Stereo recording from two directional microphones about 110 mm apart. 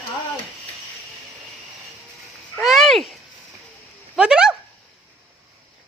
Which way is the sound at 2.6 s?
Centre (ahead or behind).